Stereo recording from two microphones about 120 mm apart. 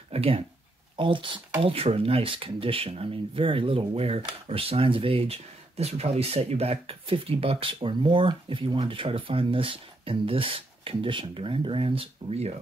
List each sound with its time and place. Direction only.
0.1 s speech: 50° right (ahead or behind)
1.6 s speech: 55° right (ahead or behind)